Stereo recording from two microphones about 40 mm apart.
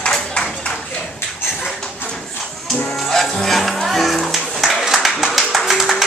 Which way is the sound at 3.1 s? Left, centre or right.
Centre.